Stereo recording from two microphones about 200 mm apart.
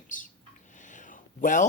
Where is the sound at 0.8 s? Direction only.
40° left (ahead or behind).